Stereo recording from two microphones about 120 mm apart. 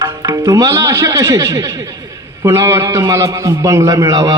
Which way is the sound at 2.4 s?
25° right (ahead or behind).